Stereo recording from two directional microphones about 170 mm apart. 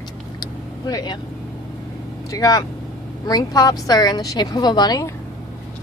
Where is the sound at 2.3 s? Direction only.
20° left (ahead or behind).